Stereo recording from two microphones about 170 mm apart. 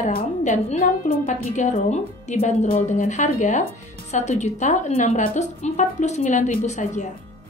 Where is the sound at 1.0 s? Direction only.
55° left (ahead or behind).